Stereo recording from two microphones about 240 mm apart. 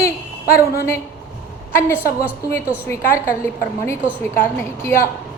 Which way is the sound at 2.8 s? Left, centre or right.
Centre.